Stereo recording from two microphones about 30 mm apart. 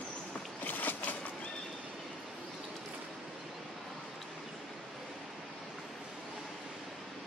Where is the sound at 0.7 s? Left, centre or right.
Left.